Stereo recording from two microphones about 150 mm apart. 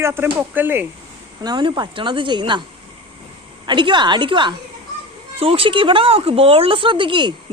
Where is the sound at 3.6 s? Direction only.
30° right (ahead or behind).